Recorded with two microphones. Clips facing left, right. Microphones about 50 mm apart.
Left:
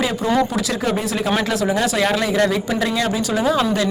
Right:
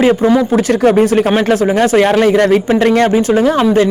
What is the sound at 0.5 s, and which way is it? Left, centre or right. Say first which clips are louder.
Speech: right 11 dB; right.